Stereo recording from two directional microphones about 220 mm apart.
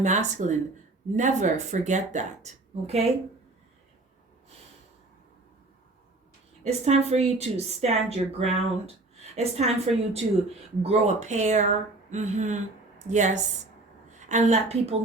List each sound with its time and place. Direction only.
0.0 s speech: 35° right (ahead or behind)
6.7 s a woman's voice: 30° right (ahead or behind)